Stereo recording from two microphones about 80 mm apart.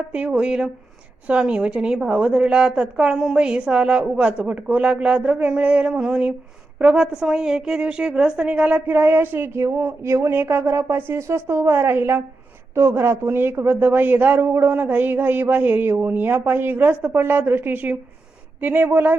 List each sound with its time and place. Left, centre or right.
0.3 s a woman's voice: centre; by 19.1 s right